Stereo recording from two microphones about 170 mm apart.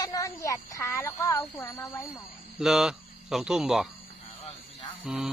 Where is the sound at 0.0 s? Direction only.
20° left (ahead or behind).